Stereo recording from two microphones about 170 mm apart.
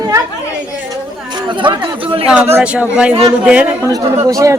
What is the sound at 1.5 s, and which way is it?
Speech, 30° right (ahead or behind).